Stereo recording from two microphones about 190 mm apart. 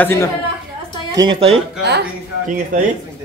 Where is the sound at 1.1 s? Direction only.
20° right (ahead or behind).